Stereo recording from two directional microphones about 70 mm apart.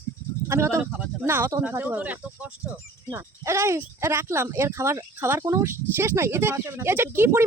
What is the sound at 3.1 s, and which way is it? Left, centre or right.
Speech, right.